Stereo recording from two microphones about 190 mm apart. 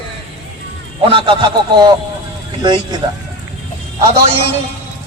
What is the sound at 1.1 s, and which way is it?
A man's voice, 25° right (ahead or behind).